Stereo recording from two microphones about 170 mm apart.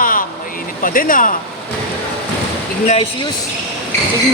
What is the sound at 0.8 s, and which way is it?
Speech, 55° left (ahead or behind).